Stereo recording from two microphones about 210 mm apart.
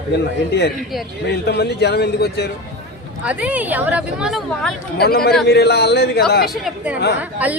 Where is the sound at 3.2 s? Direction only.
5° right (ahead or behind).